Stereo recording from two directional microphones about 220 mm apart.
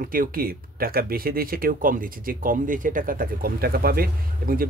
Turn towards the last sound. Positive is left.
turn(degrees=-40)  # may be behind; listen again after turning